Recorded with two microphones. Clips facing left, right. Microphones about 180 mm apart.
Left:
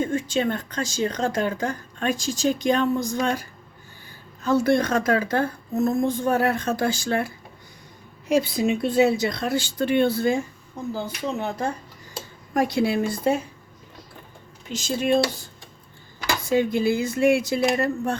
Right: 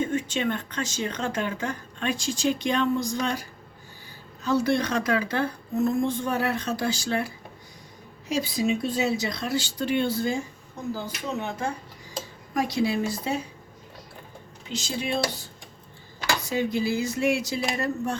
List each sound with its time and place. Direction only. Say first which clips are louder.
0.0 s speech: left 3 dB; 35° left (ahead or behind)
4.4 s speech: left 4 dB; 50° left (ahead or behind)
8.3 s speech: left 4 dB; 55° left (ahead or behind)
11.0 s speech: left 3 dB; 35° left (ahead or behind)
12.5 s speech: left 3 dB; 55° left (ahead or behind)
14.7 s speech: left 7 dB; 45° left (ahead or behind)
16.5 s speech: left 6 dB; 55° left (ahead or behind)